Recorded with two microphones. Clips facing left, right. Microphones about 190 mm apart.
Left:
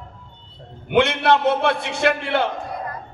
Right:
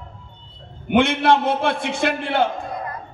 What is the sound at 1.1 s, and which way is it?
A man's voice, 60° left (ahead or behind).